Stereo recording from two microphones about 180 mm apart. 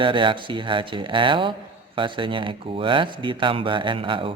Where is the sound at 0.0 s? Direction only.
25° right (ahead or behind).